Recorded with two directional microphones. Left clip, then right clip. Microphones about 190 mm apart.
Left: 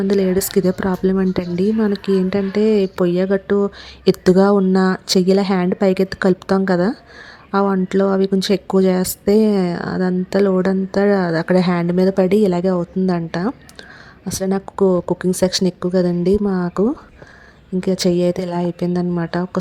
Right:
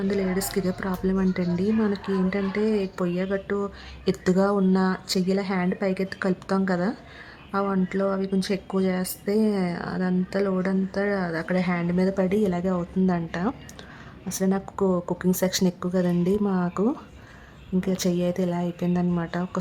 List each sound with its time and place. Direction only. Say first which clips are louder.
0.1 s a woman's voice: left 12 dB; 35° left (ahead or behind)